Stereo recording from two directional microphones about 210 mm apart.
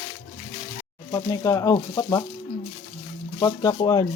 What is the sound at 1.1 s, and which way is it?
Speech, 15° left (ahead or behind).